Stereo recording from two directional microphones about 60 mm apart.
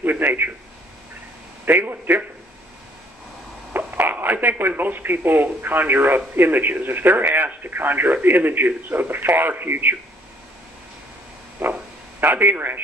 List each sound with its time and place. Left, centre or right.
0.0 s a man's voice: right
1.7 s speech: right
3.7 s speech: right
11.6 s a sound: right
12.2 s speech: right